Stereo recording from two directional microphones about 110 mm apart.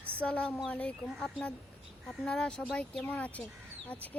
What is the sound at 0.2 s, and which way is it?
Speech, 10° left (ahead or behind).